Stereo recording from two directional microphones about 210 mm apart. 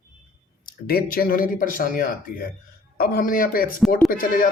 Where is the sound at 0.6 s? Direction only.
45° left (ahead or behind).